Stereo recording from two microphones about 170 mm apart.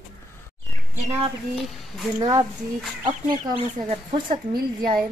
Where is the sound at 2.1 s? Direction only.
25° right (ahead or behind).